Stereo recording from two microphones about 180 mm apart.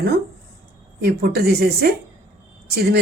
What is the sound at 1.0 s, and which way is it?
Speech, 60° right (ahead or behind).